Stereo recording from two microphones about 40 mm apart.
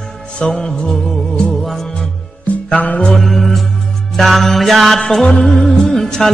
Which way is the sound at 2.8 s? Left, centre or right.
Left.